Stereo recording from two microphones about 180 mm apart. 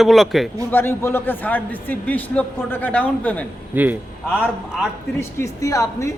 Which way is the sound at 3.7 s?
10° right (ahead or behind).